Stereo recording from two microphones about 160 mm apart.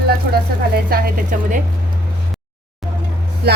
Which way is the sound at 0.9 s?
60° right (ahead or behind).